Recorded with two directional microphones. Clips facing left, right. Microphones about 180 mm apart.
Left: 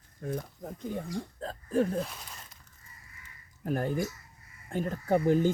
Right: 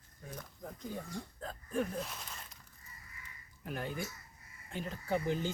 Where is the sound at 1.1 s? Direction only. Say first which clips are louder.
Left 7 dB; 35° left (ahead or behind).